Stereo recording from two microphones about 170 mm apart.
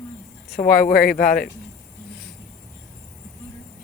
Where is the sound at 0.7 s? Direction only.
55° left (ahead or behind).